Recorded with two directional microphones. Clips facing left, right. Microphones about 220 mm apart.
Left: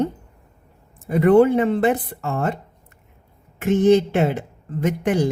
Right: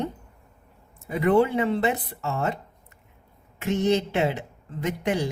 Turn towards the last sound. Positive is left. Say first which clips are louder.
# left 6 dB
turn(degrees=50)  # may be behind; listen again after turning